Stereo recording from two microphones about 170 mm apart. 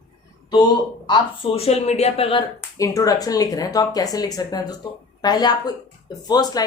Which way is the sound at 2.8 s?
20° left (ahead or behind).